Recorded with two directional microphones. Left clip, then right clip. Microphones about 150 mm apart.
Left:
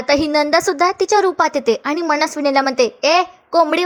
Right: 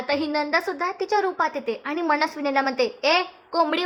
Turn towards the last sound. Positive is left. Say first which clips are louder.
# left 8 dB
turn(degrees=30)  # may be behind; listen again after turning